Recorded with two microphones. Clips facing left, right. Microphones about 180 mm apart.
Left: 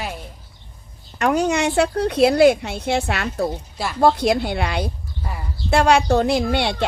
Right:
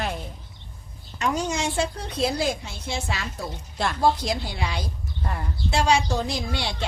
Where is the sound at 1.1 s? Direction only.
60° left (ahead or behind).